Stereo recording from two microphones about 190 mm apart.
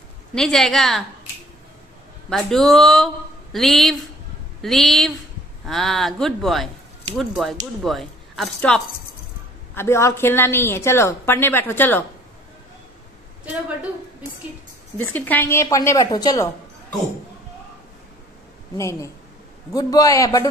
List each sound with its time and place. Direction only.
0.3 s speech: centre (ahead or behind)
2.2 s a woman's voice: centre (ahead or behind)
15.0 s a woman's voice: 10° left (ahead or behind)
18.8 s a woman's voice: 15° left (ahead or behind)